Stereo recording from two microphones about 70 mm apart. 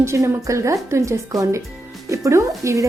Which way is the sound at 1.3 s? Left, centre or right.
Right.